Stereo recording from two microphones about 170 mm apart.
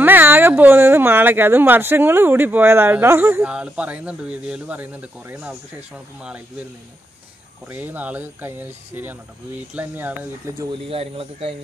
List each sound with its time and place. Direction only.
0.0 s speech: 10° right (ahead or behind)
7.6 s speech: 10° right (ahead or behind)
10.7 s speech: 35° right (ahead or behind)